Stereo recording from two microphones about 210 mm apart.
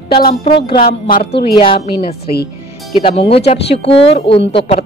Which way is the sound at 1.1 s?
50° left (ahead or behind).